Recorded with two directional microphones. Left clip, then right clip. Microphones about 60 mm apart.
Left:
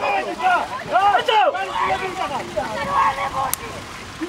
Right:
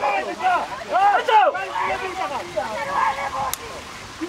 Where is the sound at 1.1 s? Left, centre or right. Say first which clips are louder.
Even; centre.